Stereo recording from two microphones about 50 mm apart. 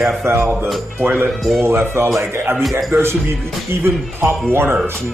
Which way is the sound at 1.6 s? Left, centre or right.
Right.